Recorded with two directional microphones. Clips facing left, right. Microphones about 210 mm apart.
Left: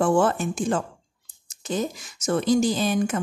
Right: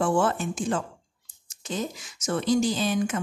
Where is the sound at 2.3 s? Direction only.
45° left (ahead or behind).